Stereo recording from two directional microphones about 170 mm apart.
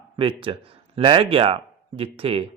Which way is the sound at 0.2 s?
30° right (ahead or behind).